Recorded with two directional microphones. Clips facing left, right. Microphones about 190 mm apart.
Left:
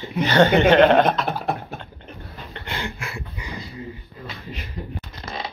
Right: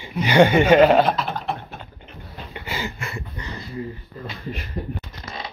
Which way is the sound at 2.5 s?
5° right (ahead or behind).